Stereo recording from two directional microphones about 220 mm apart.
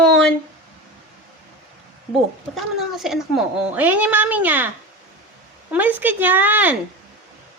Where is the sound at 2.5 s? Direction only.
Centre (ahead or behind).